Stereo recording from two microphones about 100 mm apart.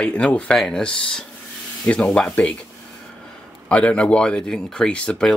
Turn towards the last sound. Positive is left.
turn(degrees=10)  # may be behind; listen again after turning